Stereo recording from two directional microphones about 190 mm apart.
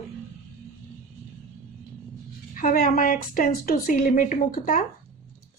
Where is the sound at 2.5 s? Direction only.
45° left (ahead or behind).